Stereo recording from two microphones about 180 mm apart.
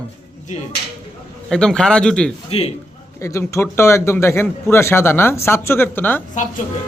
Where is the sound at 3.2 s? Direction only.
15° left (ahead or behind).